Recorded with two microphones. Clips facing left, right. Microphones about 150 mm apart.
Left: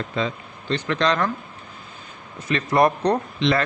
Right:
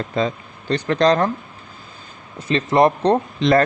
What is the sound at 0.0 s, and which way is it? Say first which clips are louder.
A man's voice: right 4 dB; 40° right (ahead or behind).